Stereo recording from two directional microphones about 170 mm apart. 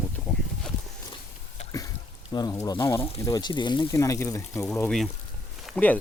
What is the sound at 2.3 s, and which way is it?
Speech, 20° left (ahead or behind).